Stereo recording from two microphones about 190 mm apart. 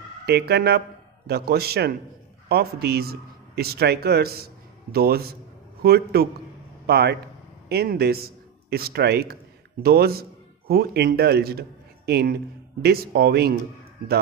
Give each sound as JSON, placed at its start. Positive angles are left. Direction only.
{"t": 0.3, "sound": "a man's voice", "side_deg": -55}